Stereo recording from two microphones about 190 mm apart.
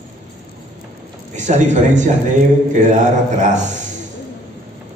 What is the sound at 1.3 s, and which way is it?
Speech, 40° right (ahead or behind).